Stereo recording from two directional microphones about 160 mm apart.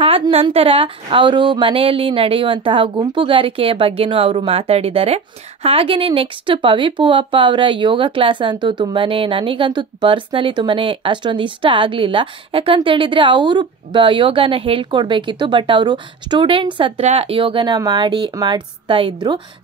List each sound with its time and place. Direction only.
0.0 s a woman's voice: 35° right (ahead or behind)